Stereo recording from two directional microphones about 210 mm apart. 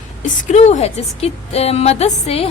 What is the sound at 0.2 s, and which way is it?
A woman's voice, 35° left (ahead or behind).